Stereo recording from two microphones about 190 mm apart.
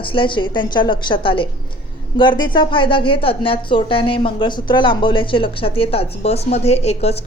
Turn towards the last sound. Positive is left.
turn(degrees=35)  # may be behind; listen again after turning